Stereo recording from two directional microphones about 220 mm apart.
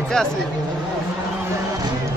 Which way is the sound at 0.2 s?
5° left (ahead or behind).